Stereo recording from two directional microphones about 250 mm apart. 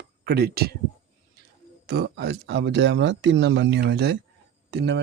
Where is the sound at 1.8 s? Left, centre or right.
Right.